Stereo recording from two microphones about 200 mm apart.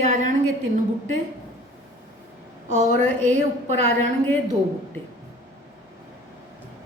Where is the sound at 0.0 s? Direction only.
40° right (ahead or behind).